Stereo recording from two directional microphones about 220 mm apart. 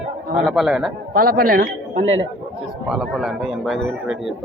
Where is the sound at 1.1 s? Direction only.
40° right (ahead or behind).